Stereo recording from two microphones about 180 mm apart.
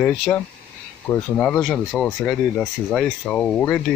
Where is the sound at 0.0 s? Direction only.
5° left (ahead or behind).